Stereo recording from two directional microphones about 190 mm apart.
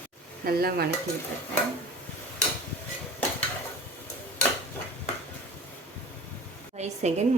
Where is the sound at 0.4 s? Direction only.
55° right (ahead or behind).